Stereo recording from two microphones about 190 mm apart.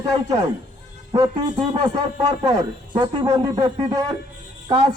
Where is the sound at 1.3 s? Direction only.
25° right (ahead or behind).